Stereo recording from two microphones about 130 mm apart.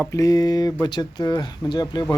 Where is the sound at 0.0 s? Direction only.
25° left (ahead or behind).